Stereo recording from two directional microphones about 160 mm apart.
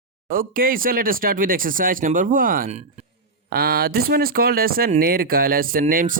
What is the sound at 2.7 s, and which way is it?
Speech, 40° right (ahead or behind).